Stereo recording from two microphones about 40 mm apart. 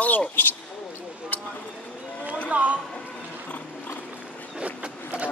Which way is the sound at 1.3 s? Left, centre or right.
Left.